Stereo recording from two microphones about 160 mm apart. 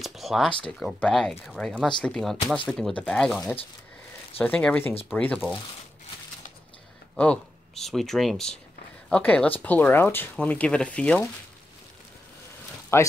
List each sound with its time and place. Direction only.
0.0 s a sound: centre (ahead or behind)
0.6 s speech: 5° left (ahead or behind)
7.2 s speech: 5° left (ahead or behind)
12.9 s speech: 15° left (ahead or behind)